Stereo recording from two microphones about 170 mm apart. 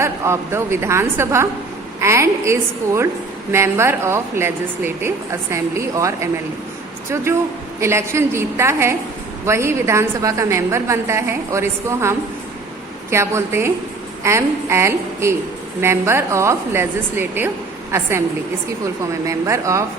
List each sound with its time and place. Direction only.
0.0 s a woman's voice: 15° right (ahead or behind)
7.8 s a woman's voice: 15° right (ahead or behind)
19.2 s speech: 20° right (ahead or behind)